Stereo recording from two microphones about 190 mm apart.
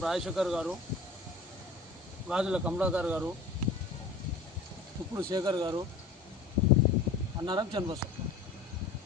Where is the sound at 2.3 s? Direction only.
5° right (ahead or behind).